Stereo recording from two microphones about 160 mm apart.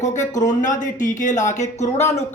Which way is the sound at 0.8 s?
50° left (ahead or behind).